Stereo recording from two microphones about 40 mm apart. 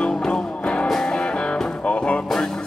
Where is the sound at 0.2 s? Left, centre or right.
Centre.